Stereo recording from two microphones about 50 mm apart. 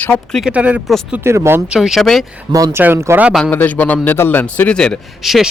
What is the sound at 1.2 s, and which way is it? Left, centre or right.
Speech, right.